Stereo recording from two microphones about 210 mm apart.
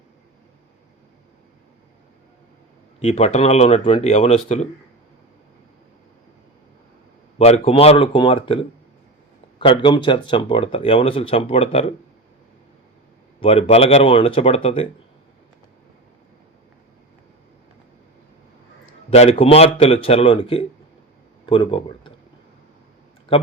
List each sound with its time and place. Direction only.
3.0 s speech: 30° left (ahead or behind)
7.3 s speech: 30° left (ahead or behind)
13.4 s speech: 25° left (ahead or behind)
19.1 s speech: 30° left (ahead or behind)